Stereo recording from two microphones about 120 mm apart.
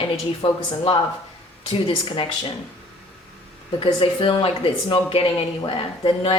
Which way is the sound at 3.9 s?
45° left (ahead or behind).